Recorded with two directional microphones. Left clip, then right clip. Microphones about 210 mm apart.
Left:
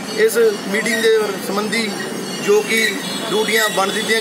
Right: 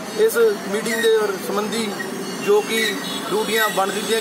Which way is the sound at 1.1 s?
10° left (ahead or behind).